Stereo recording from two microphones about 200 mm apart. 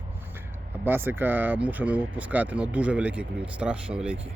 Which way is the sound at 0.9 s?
10° right (ahead or behind).